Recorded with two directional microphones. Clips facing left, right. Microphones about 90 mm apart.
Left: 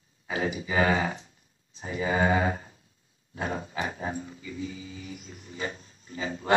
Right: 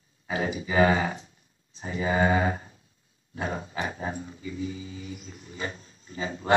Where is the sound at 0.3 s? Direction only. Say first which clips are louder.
Right 1 dB; 35° right (ahead or behind).